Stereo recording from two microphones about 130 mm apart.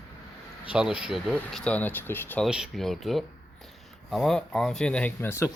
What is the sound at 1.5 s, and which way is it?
Speech, 10° left (ahead or behind).